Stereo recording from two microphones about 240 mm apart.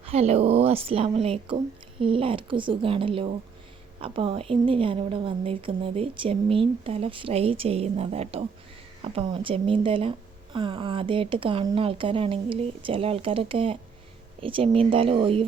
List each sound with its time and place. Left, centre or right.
0.0 s speech: right